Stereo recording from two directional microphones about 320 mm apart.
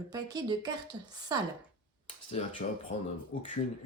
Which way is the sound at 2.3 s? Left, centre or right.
Left.